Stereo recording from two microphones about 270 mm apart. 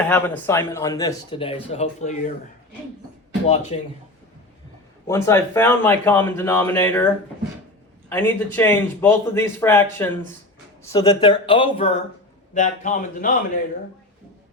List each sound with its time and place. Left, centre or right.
0.1 s speech: centre; by 2.3 s left
3.4 s speech: left
5.0 s speech: centre
8.1 s speech: centre
10.8 s speech: centre